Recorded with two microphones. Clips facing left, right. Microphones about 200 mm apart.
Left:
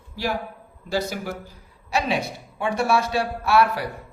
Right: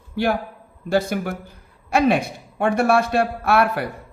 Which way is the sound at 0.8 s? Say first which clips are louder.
Right 5 dB; 55° right (ahead or behind).